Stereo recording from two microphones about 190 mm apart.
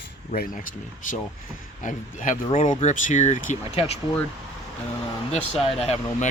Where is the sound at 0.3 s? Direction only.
45° left (ahead or behind).